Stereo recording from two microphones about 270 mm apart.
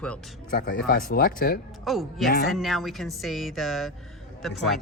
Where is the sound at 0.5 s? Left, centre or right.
Left.